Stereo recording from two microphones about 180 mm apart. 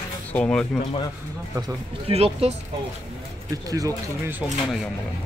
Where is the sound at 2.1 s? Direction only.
35° right (ahead or behind).